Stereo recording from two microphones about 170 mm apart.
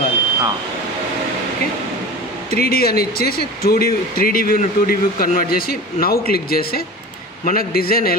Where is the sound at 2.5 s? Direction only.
65° left (ahead or behind).